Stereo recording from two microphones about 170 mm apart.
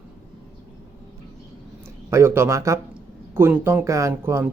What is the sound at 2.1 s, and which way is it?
Speech, 15° right (ahead or behind).